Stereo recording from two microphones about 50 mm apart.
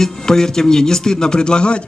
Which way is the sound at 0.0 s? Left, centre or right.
Centre.